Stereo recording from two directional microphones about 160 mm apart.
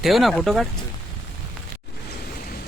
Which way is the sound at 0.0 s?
Centre (ahead or behind).